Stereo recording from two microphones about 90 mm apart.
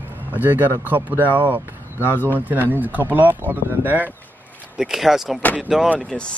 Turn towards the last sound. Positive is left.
turn(degrees=10)  # may be behind; listen again after turning